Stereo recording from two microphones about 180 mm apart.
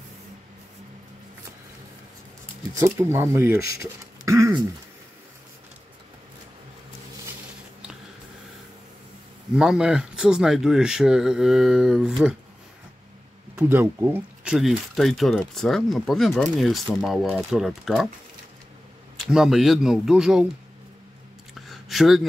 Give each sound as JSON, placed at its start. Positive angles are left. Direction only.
{"t": 2.7, "sound": "speech", "side_deg": -15}
{"t": 9.6, "sound": "speech", "side_deg": -5}
{"t": 13.6, "sound": "speech", "side_deg": -10}
{"t": 14.5, "sound": "speech", "side_deg": 0}
{"t": 19.1, "sound": "speech", "side_deg": -5}
{"t": 21.5, "sound": "a sound", "side_deg": 0}